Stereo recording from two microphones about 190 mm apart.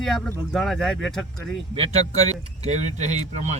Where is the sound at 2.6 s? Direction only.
35° right (ahead or behind).